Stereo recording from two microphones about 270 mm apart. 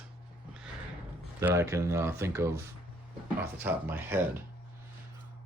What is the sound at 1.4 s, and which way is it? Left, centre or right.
Speech, centre.